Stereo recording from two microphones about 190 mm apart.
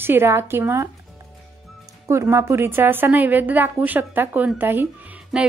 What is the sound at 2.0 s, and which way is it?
A woman's voice, 15° right (ahead or behind).